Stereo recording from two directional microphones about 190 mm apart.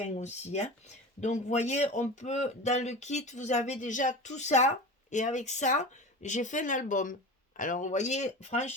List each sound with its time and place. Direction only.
0.0 s a man's voice: 35° left (ahead or behind)